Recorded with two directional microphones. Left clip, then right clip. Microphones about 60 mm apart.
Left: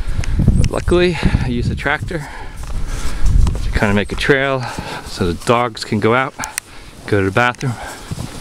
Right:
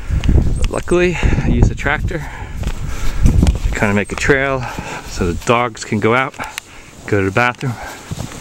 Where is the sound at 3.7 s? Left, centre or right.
Centre.